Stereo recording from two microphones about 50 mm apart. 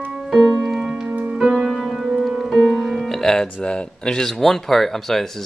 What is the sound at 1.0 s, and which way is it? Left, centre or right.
Music, right.